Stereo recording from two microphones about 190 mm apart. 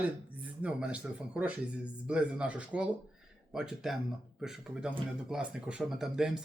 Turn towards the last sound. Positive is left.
turn(degrees=-5)  # may be behind; listen again after turning